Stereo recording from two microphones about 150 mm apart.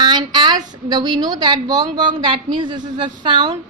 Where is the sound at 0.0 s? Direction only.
30° right (ahead or behind).